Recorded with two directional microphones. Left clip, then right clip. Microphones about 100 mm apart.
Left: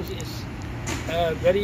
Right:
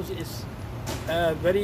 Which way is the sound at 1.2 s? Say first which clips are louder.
Left 2 dB; 35° right (ahead or behind).